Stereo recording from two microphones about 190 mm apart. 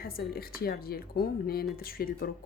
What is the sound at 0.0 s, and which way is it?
A woman's voice, 55° left (ahead or behind).